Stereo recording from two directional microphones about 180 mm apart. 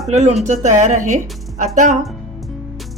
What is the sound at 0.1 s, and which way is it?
A woman's voice, 40° right (ahead or behind).